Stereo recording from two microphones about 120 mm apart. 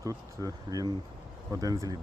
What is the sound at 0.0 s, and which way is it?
Speech, 30° right (ahead or behind).